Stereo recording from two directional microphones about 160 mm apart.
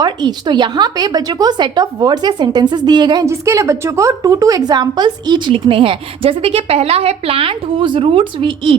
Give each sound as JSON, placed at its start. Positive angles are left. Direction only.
{"t": 0.0, "sound": "a woman's voice", "side_deg": -25}